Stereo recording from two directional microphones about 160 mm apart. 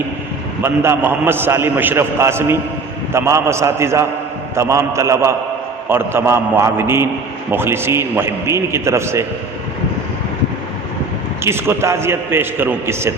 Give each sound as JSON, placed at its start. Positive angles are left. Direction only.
{"t": 0.6, "sound": "a man's voice", "side_deg": -15}
{"t": 11.4, "sound": "a man's voice", "side_deg": -15}